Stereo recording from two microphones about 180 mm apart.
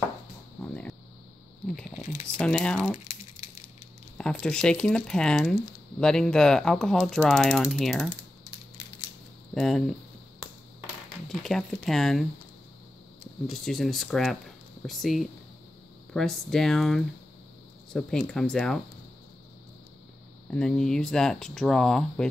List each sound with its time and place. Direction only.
0.6 s a sound: 10° left (ahead or behind)
2.2 s speech: 5° left (ahead or behind)
4.2 s speech: 5° left (ahead or behind)
9.5 s speech: centre (ahead or behind)
11.2 s speech: centre (ahead or behind)
13.5 s speech: centre (ahead or behind)
20.4 s speech: 5° left (ahead or behind)